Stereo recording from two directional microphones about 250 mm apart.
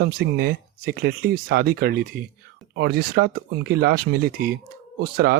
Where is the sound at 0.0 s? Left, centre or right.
Right.